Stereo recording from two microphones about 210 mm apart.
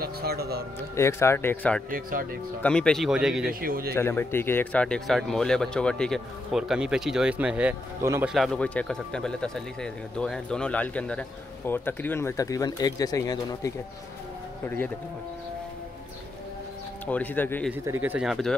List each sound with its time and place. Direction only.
0.0 s speech: 50° right (ahead or behind)
0.9 s speech: 15° left (ahead or behind)
1.9 s speech: 40° right (ahead or behind)
2.6 s speech: 5° left (ahead or behind)
3.4 s speech: 45° right (ahead or behind)
3.9 s speech: 10° left (ahead or behind)
17.0 s speech: 10° left (ahead or behind)
17.6 s speech: 10° right (ahead or behind)